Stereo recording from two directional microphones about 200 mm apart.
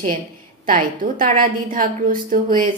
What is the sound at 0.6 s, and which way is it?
Speech, 45° right (ahead or behind).